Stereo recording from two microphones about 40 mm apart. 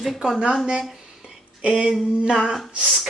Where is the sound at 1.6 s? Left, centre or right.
Right.